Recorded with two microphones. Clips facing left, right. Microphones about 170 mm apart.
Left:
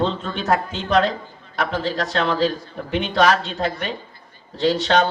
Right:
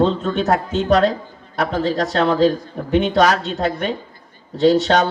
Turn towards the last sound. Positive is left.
turn(degrees=-40)  # may be behind; listen again after turning